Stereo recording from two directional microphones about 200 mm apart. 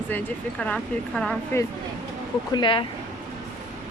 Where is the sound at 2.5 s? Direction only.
25° left (ahead or behind).